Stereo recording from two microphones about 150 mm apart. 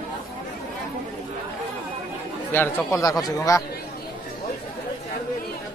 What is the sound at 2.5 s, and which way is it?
Speech, 15° left (ahead or behind).